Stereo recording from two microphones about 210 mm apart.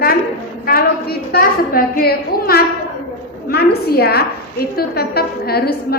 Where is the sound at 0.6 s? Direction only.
45° left (ahead or behind).